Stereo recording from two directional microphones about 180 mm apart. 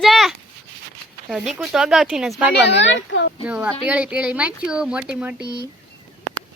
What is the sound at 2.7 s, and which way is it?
Speech, 85° left.